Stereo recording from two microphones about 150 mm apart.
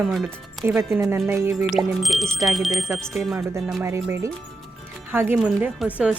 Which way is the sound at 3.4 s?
20° right (ahead or behind).